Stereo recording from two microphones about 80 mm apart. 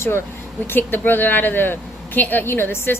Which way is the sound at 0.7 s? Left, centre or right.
Left.